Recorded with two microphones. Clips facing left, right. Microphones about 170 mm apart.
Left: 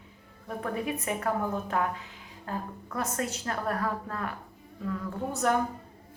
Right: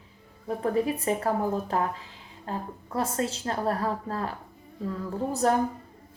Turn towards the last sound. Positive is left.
turn(degrees=-35)  # may be behind; listen again after turning